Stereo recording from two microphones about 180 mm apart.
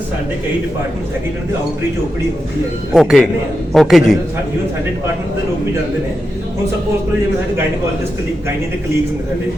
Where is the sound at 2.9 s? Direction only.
Centre (ahead or behind).